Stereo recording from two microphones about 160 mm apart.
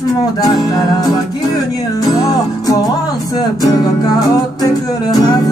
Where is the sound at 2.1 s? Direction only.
20° left (ahead or behind).